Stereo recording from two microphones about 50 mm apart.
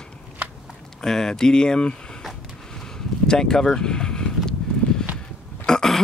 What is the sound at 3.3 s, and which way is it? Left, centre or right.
Speech, centre.